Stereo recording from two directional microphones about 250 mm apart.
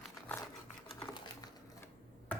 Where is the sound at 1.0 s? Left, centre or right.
Centre.